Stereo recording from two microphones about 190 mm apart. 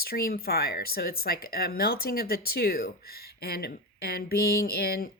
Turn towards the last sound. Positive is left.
turn(degrees=55)  # may be behind; listen again after turning